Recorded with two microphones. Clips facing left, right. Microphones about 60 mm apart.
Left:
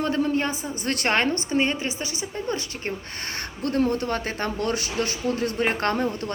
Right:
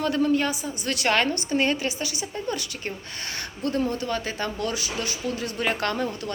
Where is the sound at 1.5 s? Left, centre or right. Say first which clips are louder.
Right 2 dB; centre.